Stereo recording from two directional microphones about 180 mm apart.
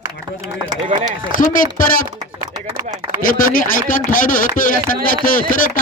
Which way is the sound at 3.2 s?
50° left (ahead or behind).